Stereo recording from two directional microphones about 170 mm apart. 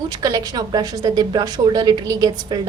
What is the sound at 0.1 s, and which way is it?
A woman's voice, 25° right (ahead or behind).